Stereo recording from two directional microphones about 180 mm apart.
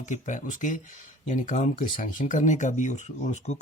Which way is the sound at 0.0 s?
45° left (ahead or behind).